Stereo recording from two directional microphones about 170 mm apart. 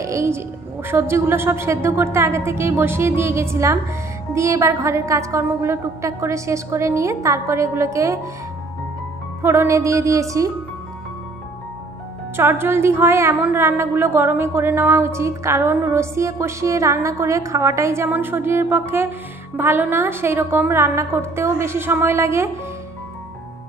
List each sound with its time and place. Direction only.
0.0 s music: 15° right (ahead or behind)
0.8 s a woman's voice: 15° right (ahead or behind)
9.4 s speech: 15° right (ahead or behind)
12.4 s a woman's voice: 15° right (ahead or behind)